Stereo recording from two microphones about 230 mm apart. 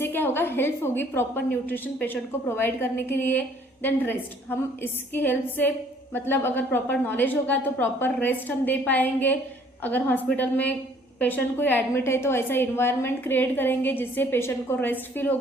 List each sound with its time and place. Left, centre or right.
0.0 s a woman's voice: centre